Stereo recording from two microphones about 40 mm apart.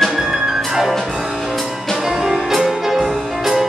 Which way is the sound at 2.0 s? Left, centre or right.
Centre.